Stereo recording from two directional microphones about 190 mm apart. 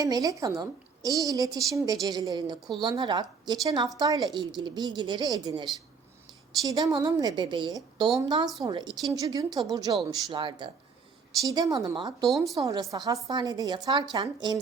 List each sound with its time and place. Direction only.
0.0 s a woman's voice: 20° right (ahead or behind)